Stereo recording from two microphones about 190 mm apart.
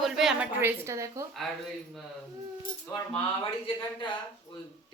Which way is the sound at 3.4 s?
25° left (ahead or behind).